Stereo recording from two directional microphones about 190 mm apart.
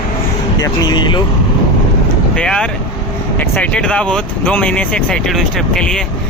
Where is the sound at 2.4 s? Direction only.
5° left (ahead or behind).